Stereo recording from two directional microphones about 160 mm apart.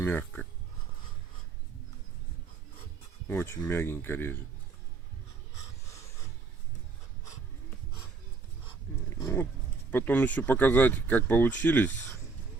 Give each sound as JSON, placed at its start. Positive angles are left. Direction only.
{"t": 0.0, "sound": "speech", "side_deg": 10}
{"t": 3.2, "sound": "speech", "side_deg": 15}
{"t": 9.1, "sound": "a sound", "side_deg": 15}
{"t": 9.9, "sound": "speech", "side_deg": 10}